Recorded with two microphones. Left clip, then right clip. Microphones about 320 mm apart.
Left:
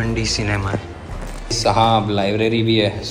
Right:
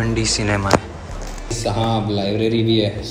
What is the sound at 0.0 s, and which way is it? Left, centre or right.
A man's voice, centre.